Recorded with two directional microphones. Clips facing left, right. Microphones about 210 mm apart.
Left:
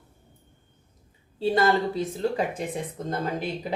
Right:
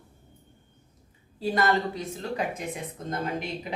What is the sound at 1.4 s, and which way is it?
A woman's voice, 30° left (ahead or behind).